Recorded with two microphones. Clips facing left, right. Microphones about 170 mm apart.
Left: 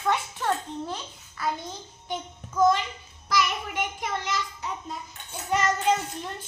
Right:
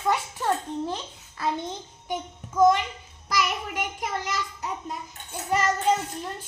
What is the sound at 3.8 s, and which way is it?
A child's voice, 10° right (ahead or behind).